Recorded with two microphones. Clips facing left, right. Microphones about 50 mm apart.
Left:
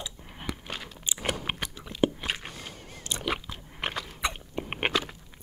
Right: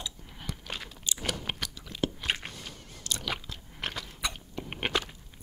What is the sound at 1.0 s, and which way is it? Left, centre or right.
Chewing, left.